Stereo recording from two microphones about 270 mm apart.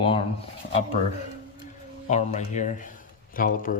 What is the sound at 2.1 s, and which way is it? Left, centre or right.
Speech, left.